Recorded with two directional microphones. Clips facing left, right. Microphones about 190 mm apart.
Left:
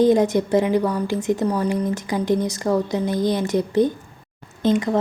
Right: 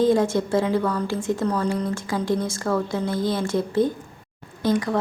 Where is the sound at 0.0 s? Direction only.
20° left (ahead or behind).